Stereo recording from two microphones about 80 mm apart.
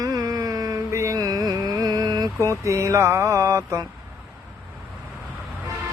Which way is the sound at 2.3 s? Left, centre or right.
Right.